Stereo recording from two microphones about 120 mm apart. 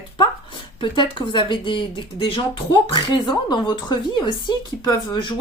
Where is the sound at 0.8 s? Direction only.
40° left (ahead or behind).